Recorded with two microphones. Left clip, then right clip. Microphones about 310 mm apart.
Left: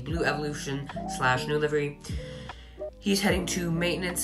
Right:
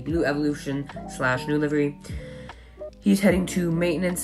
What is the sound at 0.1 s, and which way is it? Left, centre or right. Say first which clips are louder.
Speech: right 5 dB; centre.